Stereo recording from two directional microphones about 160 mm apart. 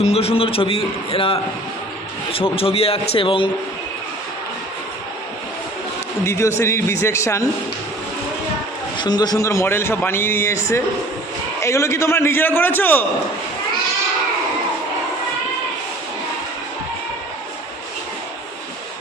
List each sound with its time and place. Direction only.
0.0 s a man's voice: 40° left (ahead or behind)
6.2 s a man's voice: 15° left (ahead or behind)
9.0 s a man's voice: 25° left (ahead or behind)